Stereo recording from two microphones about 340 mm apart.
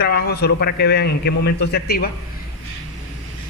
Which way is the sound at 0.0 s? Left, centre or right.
Left.